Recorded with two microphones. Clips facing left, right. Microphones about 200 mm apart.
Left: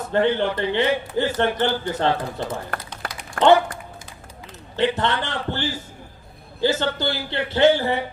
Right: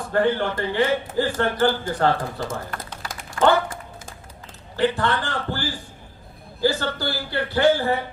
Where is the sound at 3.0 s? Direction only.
55° left (ahead or behind).